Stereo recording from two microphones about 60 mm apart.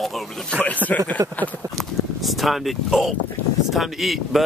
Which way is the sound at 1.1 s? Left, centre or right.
Left.